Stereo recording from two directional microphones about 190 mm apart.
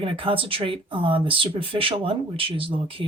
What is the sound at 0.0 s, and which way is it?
Speech, 25° right (ahead or behind).